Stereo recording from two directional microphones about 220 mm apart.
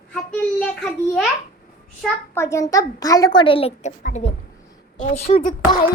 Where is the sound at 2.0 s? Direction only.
5° left (ahead or behind); by 4.3 s 30° left (ahead or behind).